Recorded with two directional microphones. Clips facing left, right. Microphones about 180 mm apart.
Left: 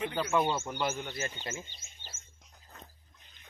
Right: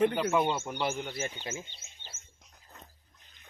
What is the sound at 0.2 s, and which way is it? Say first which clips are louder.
Speech: right 1 dB; 5° right (ahead or behind).